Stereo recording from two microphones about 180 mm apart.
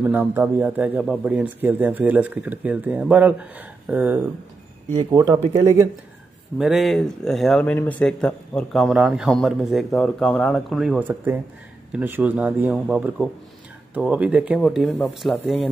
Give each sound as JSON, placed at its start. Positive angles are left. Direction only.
{"t": 0.0, "sound": "speech", "side_deg": -10}
{"t": 4.9, "sound": "speech", "side_deg": -20}
{"t": 6.6, "sound": "speech", "side_deg": 0}